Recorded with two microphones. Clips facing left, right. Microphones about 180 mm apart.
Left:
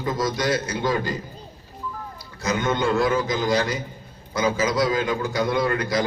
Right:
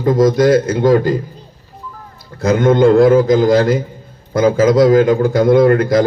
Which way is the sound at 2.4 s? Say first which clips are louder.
Right 12 dB; 55° right (ahead or behind).